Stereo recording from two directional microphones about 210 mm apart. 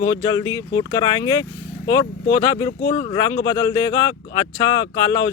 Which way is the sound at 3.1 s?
15° left (ahead or behind).